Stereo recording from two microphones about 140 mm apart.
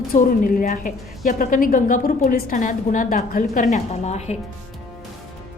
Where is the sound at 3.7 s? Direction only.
55° left (ahead or behind).